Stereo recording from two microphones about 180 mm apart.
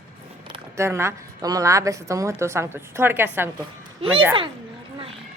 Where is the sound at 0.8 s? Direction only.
15° right (ahead or behind).